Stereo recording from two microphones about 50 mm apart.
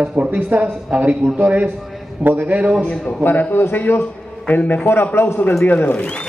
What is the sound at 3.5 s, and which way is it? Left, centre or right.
A man's voice, left.